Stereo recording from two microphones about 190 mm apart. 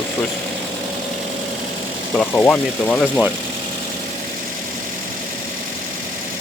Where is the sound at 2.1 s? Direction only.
5° left (ahead or behind).